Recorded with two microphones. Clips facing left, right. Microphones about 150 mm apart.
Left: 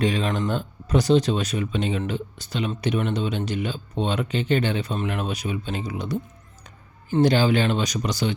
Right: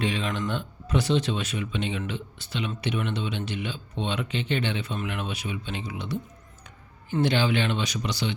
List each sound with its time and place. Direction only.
0.0 s speech: 40° left (ahead or behind)